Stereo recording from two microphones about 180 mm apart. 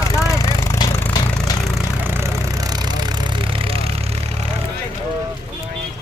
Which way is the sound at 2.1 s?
15° right (ahead or behind).